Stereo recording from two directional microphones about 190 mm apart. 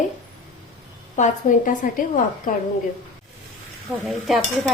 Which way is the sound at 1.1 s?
40° left (ahead or behind).